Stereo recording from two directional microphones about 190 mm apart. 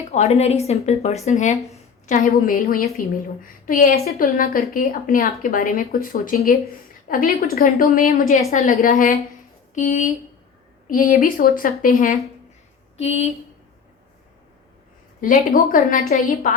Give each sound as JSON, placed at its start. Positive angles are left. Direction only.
{"t": 0.1, "sound": "speech", "side_deg": 35}
{"t": 2.3, "sound": "a woman's voice", "side_deg": 50}
{"t": 8.3, "sound": "a woman's voice", "side_deg": 35}
{"t": 13.0, "sound": "speech", "side_deg": 35}
{"t": 15.2, "sound": "a woman's voice", "side_deg": 45}